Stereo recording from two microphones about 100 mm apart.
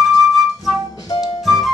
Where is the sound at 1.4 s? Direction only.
Centre (ahead or behind).